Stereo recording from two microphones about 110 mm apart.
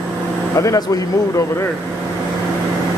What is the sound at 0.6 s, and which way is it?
Speech, 30° left (ahead or behind).